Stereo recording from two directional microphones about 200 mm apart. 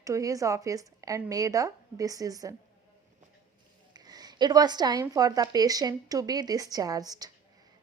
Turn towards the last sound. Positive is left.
turn(degrees=-20)  # may be behind; listen again after turning